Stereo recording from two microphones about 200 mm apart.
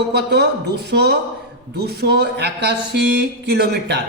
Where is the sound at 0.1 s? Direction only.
55° right (ahead or behind).